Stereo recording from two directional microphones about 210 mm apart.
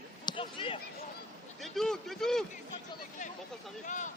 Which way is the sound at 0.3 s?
25° left (ahead or behind).